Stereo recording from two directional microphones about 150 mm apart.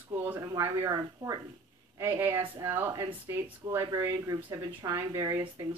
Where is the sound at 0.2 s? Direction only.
20° right (ahead or behind).